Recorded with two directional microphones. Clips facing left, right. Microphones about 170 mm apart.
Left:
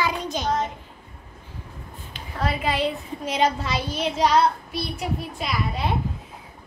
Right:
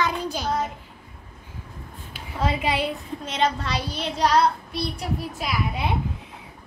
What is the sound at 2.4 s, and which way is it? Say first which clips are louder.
Speech: even; 20° right (ahead or behind).